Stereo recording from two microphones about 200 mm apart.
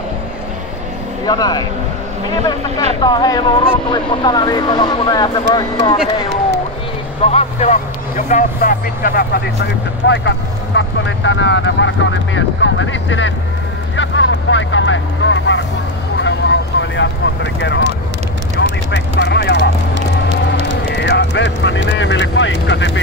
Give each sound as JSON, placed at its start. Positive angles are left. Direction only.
{"t": 1.2, "sound": "speech", "side_deg": 20}
{"t": 3.0, "sound": "speech", "side_deg": 20}
{"t": 7.2, "sound": "speech", "side_deg": 35}
{"t": 10.0, "sound": "speech", "side_deg": 60}
{"t": 16.2, "sound": "vehicle", "side_deg": 65}
{"t": 18.9, "sound": "speech", "side_deg": 60}
{"t": 21.0, "sound": "speech", "side_deg": 60}